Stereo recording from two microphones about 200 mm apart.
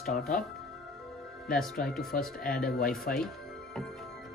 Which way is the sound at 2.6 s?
50° left (ahead or behind).